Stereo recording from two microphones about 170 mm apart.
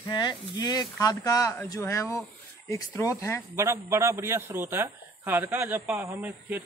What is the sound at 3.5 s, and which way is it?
Speech, 15° right (ahead or behind).